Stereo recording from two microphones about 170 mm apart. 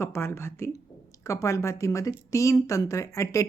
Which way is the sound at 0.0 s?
15° left (ahead or behind).